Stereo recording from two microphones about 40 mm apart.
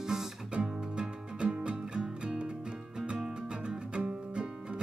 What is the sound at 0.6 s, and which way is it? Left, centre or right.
Music, right.